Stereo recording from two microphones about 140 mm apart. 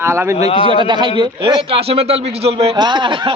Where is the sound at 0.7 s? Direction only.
35° right (ahead or behind).